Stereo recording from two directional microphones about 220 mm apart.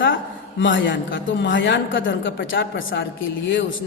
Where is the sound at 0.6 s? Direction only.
60° left (ahead or behind).